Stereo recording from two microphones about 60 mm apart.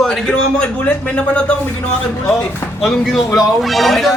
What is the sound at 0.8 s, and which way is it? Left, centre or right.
A man's voice, left.